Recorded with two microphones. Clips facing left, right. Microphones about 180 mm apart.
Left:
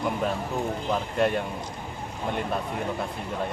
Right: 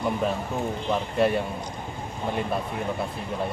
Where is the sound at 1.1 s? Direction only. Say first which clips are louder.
Right 2 dB; 5° right (ahead or behind).